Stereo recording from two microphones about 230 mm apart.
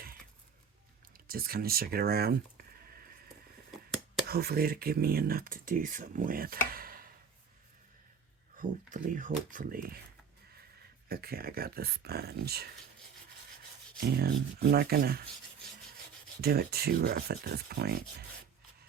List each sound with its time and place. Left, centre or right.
1.1 s speech: right
4.3 s speech: right
8.5 s speech: right
11.1 s speech: right
14.0 s speech: right
16.4 s speech: right